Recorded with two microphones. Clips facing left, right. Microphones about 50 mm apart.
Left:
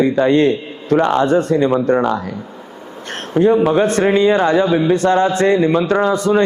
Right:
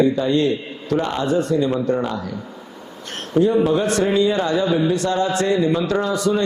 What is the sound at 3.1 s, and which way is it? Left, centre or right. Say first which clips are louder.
A man's voice: left 4 dB; left.